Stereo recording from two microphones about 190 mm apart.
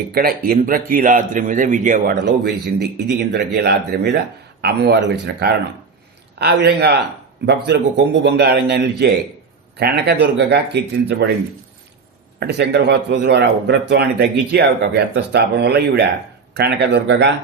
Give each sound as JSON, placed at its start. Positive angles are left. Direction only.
{"t": 0.1, "sound": "a man's voice", "side_deg": -50}
{"t": 2.2, "sound": "speech", "side_deg": -60}
{"t": 7.4, "sound": "speech", "side_deg": -70}
{"t": 12.4, "sound": "speech", "side_deg": -60}